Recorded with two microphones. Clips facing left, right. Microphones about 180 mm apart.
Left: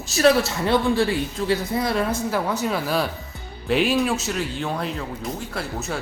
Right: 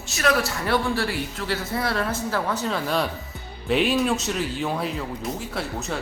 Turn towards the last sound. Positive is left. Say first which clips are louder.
# even
turn(degrees=0)  # may be behind; listen again after turning